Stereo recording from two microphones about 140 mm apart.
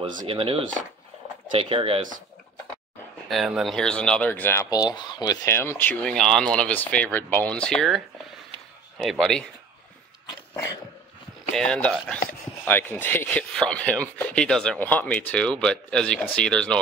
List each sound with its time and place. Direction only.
0.3 s speech: 40° right (ahead or behind)
3.3 s speech: centre (ahead or behind); by 4.6 s 15° left (ahead or behind)
4.6 s speech: 30° left (ahead or behind)
6.1 s speech: 5° left (ahead or behind)
11.5 s speech: 5° left (ahead or behind)